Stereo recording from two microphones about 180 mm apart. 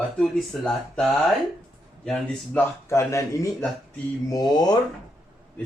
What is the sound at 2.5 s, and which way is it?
Speech, 15° left (ahead or behind).